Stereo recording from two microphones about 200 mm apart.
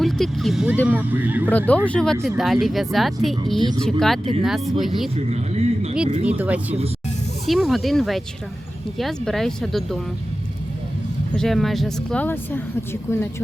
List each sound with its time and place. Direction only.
0.0 s speech: centre (ahead or behind)
1.5 s speech: 10° left (ahead or behind)
5.1 s a man's voice: 30° right (ahead or behind)
6.2 s speech: 10° right (ahead or behind)
11.3 s speech: centre (ahead or behind)